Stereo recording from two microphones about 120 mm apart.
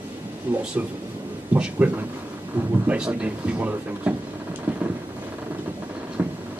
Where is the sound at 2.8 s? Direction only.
10° right (ahead or behind).